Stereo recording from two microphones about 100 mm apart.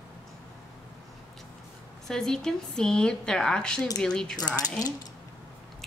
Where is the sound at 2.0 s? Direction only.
5° left (ahead or behind).